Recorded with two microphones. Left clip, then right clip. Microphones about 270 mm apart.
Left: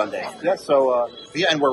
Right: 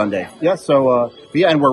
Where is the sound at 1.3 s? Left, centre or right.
Right.